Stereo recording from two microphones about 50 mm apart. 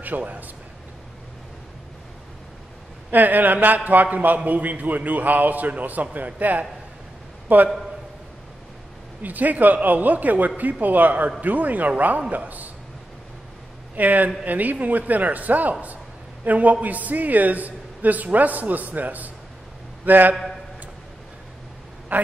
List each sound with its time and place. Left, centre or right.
0.0 s a man's voice: right
3.1 s a man's voice: right
9.2 s a man's voice: right
13.9 s a man's voice: right
22.1 s a man's voice: right